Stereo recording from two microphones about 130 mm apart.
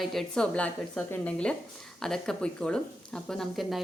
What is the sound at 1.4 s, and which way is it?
A woman's voice, 5° left (ahead or behind).